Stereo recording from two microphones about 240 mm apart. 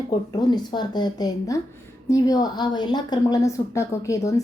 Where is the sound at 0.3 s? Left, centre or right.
Centre.